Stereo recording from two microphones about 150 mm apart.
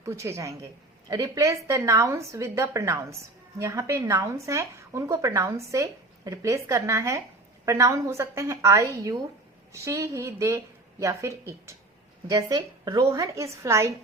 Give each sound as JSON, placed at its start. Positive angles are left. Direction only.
{"t": 0.0, "sound": "speech", "side_deg": -20}